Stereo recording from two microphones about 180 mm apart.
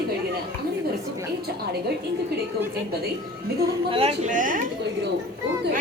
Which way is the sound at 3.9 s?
35° right (ahead or behind).